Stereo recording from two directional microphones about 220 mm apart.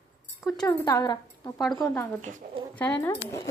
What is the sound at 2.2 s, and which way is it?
Speech, 35° right (ahead or behind).